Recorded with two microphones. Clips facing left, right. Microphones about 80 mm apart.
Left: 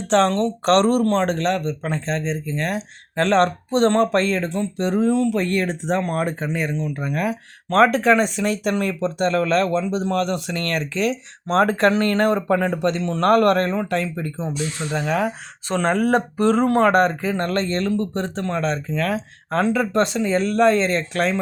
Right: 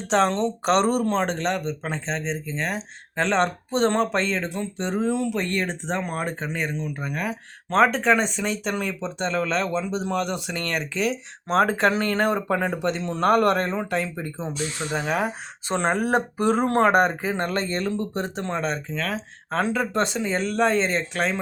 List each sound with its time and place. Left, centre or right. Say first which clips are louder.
0.1 s speech: left 3 dB; centre
5.0 s speech: left 5 dB; centre
5.3 s speech: left 5 dB; centre
13.0 s speech: left 3 dB; centre
14.9 s speech: left 3 dB; centre
18.9 s speech: left 5 dB; centre